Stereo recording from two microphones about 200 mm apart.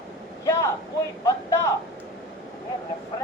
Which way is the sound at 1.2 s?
15° left (ahead or behind).